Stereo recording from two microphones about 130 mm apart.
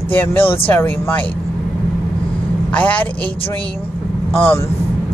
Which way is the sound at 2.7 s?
10° left (ahead or behind).